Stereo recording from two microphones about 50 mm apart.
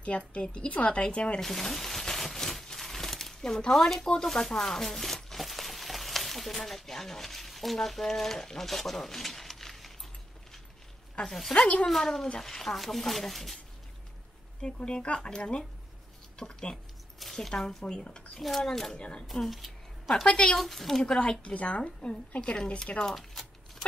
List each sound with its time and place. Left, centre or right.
0.3 s speech: left
1.4 s a sound: centre
4.5 s speech: centre
11.2 s speech: centre
11.5 s speech: centre
11.9 s speech: centre
14.6 s speech: centre
18.9 s speech: left
19.3 s a woman's voice: centre
20.2 s speech: centre
20.5 s speech: centre
21.5 s speech: left
23.1 s a sound: centre